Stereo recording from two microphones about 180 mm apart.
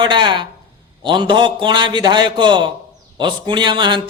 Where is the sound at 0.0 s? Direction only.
25° right (ahead or behind).